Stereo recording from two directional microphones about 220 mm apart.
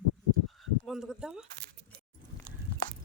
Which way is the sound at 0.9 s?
Centre (ahead or behind).